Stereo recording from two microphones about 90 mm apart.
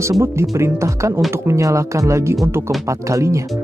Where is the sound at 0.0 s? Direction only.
30° right (ahead or behind).